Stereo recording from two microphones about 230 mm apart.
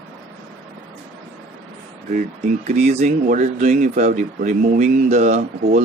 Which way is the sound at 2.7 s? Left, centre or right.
Right.